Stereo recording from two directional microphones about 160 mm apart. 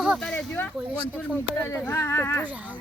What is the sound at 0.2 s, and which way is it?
Speech, 5° left (ahead or behind).